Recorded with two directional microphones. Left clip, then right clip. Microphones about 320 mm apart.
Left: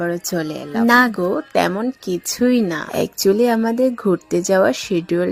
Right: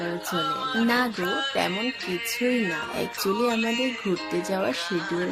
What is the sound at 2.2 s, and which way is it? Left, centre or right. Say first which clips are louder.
Speech: left 7 dB; left.